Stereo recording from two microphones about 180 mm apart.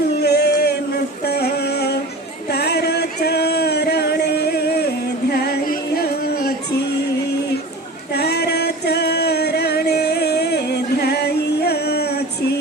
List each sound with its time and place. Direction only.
0.2 s singing: 65° left (ahead or behind)
1.2 s music: 65° left (ahead or behind)
2.5 s a sound: 65° left (ahead or behind)
5.3 s music: 60° left (ahead or behind)
8.1 s music: 65° left (ahead or behind)